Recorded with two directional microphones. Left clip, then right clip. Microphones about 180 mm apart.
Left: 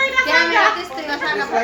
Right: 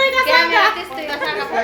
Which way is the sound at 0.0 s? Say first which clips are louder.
Right 2 dB; 20° right (ahead or behind).